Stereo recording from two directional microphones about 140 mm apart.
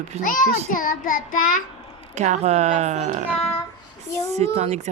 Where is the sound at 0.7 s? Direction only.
75° left (ahead or behind).